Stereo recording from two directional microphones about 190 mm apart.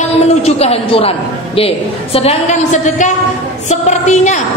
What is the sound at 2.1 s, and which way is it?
A man's voice, 35° left (ahead or behind).